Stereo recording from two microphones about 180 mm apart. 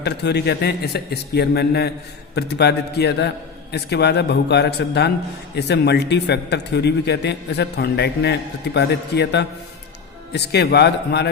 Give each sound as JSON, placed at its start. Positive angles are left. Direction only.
{"t": 0.0, "sound": "a man's voice", "side_deg": 65}